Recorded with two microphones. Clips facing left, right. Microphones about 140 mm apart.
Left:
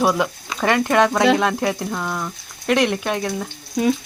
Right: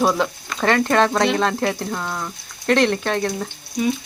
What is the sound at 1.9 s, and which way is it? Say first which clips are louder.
Speech: left 1 dB; centre (ahead or behind).